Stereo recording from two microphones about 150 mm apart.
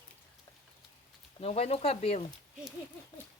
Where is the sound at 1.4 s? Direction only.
45° left (ahead or behind).